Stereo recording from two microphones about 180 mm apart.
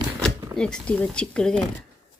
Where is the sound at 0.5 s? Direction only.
5° left (ahead or behind).